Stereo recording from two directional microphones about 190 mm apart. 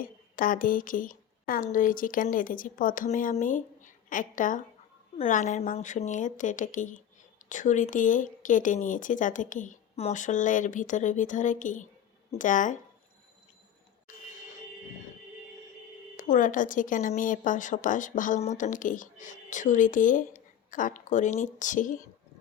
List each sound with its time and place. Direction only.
0.0 s a woman's voice: 45° left (ahead or behind)
16.1 s a woman's voice: 45° left (ahead or behind)